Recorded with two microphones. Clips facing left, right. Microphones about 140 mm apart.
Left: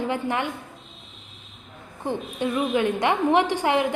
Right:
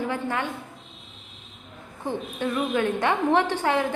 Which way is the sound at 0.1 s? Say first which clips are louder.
Left 2 dB; 20° left (ahead or behind).